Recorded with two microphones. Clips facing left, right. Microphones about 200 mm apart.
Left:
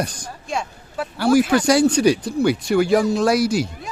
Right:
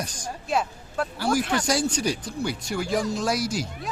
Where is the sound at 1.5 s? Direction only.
65° left (ahead or behind).